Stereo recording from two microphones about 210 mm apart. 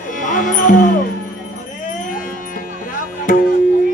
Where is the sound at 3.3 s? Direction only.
40° left (ahead or behind).